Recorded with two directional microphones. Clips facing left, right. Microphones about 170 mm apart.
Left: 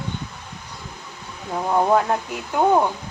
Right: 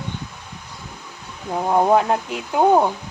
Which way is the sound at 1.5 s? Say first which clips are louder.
Right 2 dB; 20° right (ahead or behind).